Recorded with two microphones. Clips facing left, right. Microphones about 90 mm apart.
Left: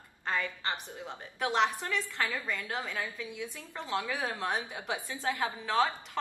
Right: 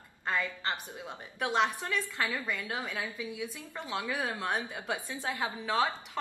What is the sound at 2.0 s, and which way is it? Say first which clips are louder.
A woman's voice: even; 15° right (ahead or behind).